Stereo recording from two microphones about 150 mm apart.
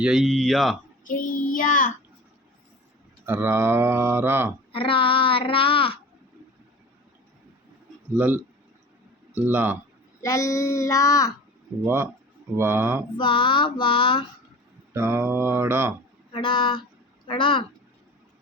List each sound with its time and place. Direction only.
0.0 s speech: 5° right (ahead or behind)
1.0 s child singing: 65° left (ahead or behind)
3.2 s speech: 15° right (ahead or behind)
4.7 s a child's voice: 35° left (ahead or behind)
8.1 s speech: 15° right (ahead or behind)
10.2 s child singing: 20° left (ahead or behind)
12.5 s speech: 15° right (ahead or behind)
13.1 s a child's voice: 35° left (ahead or behind)
14.9 s speech: 15° right (ahead or behind)
16.3 s a child's voice: 35° left (ahead or behind)